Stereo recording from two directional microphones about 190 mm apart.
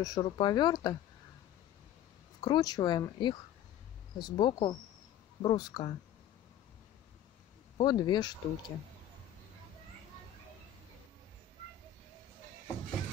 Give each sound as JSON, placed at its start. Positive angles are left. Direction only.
{"t": 0.0, "sound": "speech", "side_deg": 20}
{"t": 2.4, "sound": "speech", "side_deg": 20}
{"t": 7.7, "sound": "speech", "side_deg": 25}